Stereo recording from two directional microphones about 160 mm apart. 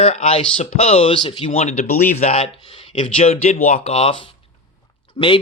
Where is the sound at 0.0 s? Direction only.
40° left (ahead or behind).